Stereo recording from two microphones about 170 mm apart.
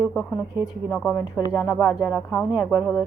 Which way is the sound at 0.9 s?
15° left (ahead or behind).